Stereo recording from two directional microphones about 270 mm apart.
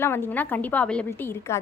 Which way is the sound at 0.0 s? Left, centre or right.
Centre.